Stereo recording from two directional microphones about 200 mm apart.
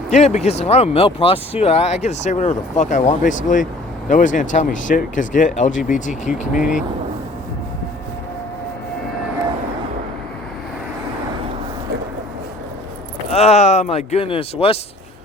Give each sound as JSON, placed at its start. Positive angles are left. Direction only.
{"t": 0.1, "sound": "speech", "side_deg": 35}
{"t": 6.6, "sound": "speech", "side_deg": -5}
{"t": 13.3, "sound": "speech", "side_deg": 30}